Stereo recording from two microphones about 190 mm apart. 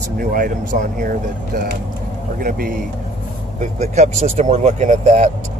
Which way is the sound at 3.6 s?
35° right (ahead or behind).